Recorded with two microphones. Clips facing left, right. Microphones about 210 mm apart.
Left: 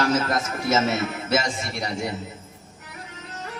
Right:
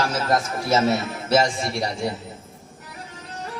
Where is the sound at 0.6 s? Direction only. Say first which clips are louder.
Right 1 dB; 35° right (ahead or behind).